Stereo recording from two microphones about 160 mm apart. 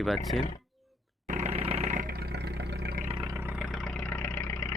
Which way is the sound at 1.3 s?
45° right (ahead or behind).